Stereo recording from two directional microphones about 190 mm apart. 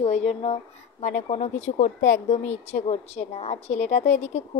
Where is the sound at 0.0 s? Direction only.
35° left (ahead or behind).